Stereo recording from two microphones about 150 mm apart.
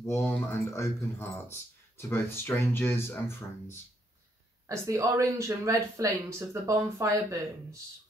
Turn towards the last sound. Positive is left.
turn(degrees=-20)  # may be behind; listen again after turning